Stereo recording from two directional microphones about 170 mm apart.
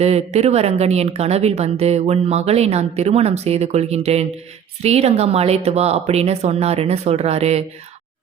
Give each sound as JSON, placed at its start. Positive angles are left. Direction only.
{"t": 0.0, "sound": "a woman's voice", "side_deg": -40}